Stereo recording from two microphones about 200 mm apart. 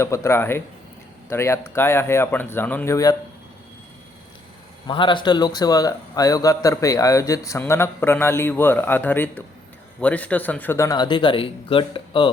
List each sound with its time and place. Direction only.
0.0 s a man's voice: 15° left (ahead or behind)
4.9 s a man's voice: 25° left (ahead or behind)